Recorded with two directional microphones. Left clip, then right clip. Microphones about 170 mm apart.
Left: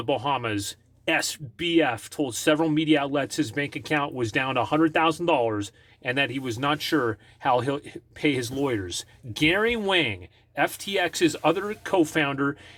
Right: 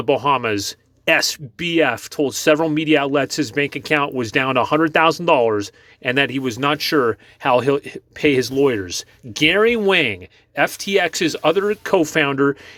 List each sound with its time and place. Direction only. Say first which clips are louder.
0.0 s speech: right 8 dB; 35° right (ahead or behind)